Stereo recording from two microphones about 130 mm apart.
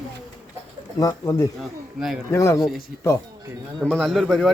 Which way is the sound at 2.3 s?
20° left (ahead or behind).